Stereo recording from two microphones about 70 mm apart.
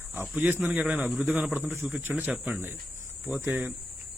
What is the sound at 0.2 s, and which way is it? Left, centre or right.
Speech, right.